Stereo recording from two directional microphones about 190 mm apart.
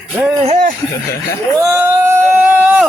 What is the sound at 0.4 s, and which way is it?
Speech, 40° right (ahead or behind).